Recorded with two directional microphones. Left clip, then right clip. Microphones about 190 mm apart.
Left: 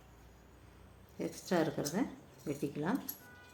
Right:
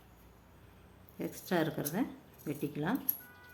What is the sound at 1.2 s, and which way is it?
Speech, 15° right (ahead or behind).